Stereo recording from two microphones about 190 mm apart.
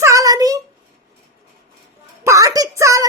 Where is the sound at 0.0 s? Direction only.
15° right (ahead or behind).